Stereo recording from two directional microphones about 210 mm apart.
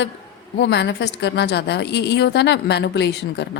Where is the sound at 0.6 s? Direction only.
55° left (ahead or behind).